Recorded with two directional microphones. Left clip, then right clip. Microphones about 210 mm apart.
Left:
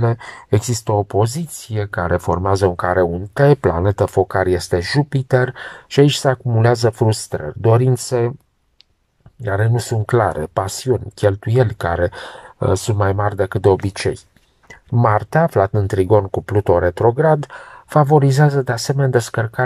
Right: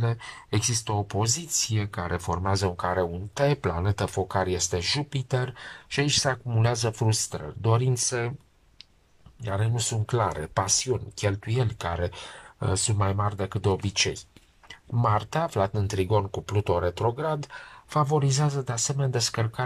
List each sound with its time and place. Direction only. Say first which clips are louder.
0.0 s speech: left 12 dB; 30° left (ahead or behind)
9.4 s speech: left 10 dB; 40° left (ahead or behind)
13.1 s speech: left 11 dB; 40° left (ahead or behind)